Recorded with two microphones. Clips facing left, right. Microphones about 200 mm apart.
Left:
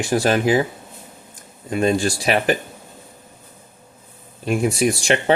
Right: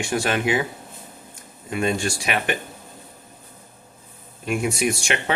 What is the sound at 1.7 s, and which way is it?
Speech, 35° left (ahead or behind).